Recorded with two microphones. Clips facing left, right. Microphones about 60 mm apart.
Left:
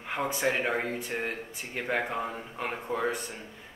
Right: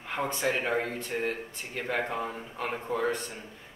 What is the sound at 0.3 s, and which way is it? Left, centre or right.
A woman's voice, centre.